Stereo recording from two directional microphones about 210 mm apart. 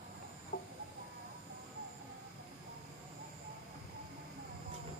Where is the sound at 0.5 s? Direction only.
45° left (ahead or behind).